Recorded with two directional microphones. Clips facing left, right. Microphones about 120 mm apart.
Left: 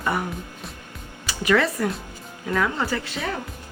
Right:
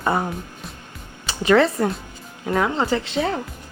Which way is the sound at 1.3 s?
30° right (ahead or behind).